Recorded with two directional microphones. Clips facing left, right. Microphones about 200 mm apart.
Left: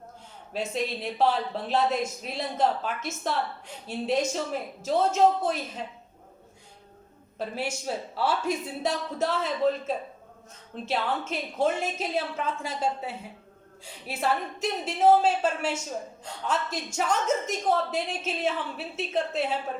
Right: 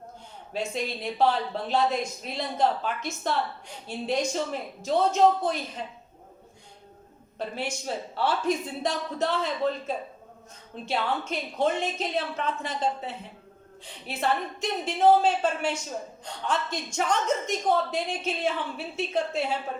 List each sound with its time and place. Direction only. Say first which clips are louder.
0.5 s a woman's voice: left 1 dB; 5° left (ahead or behind)
7.3 s a woman's voice: left 1 dB; 5° left (ahead or behind)